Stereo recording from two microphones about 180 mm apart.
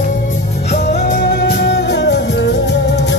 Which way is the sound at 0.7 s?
40° left (ahead or behind).